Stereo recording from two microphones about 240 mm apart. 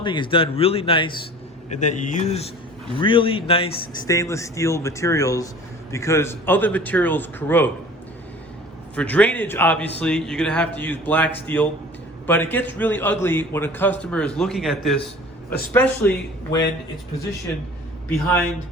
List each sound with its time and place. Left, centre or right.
0.0 s a man's voice: centre
9.0 s a man's voice: centre
18.3 s speech: centre